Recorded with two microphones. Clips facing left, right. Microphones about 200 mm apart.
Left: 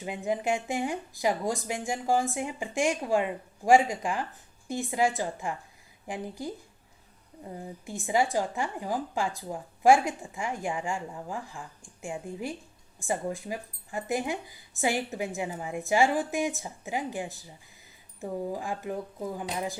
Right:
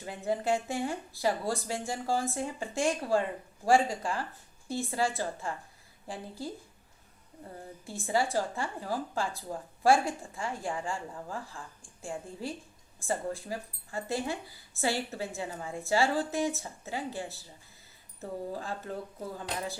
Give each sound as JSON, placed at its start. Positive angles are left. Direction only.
{"t": 0.0, "sound": "a woman's voice", "side_deg": 15}